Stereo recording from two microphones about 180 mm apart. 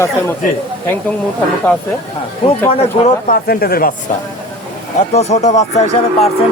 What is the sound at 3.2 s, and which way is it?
Speech, 55° left (ahead or behind).